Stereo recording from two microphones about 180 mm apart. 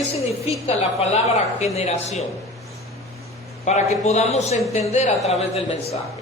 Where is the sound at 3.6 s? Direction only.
40° left (ahead or behind).